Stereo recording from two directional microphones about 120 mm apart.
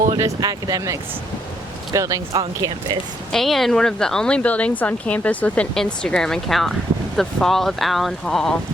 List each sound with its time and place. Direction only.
0.2 s speech: 30° right (ahead or behind)
2.4 s speech: 40° right (ahead or behind)
3.3 s speech: centre (ahead or behind)